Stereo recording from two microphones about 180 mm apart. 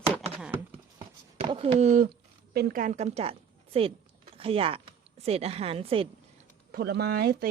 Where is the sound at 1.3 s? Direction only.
30° right (ahead or behind).